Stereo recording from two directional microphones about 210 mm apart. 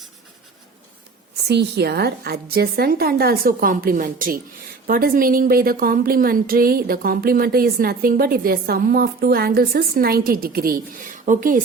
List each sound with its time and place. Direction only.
1.5 s a woman's voice: 50° right (ahead or behind)